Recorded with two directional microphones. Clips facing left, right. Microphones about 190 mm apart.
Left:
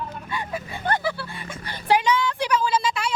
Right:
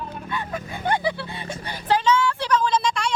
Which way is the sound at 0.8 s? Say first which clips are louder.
Right 2 dB; 15° right (ahead or behind).